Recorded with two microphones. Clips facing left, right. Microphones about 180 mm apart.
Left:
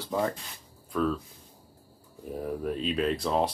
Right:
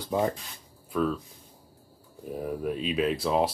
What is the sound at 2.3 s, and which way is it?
Speech, 5° right (ahead or behind).